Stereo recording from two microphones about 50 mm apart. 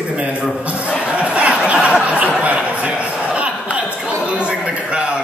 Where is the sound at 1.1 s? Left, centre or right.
Right.